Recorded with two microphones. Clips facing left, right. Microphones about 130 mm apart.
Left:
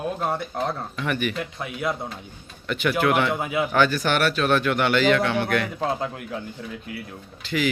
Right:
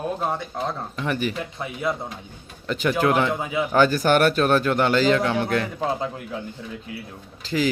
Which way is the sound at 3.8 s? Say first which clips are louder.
Right 5 dB; 45° right (ahead or behind).